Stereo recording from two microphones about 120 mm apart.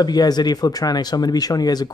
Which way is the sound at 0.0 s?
35° left (ahead or behind).